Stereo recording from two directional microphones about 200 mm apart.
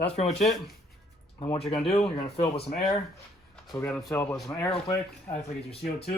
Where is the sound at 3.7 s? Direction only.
15° left (ahead or behind).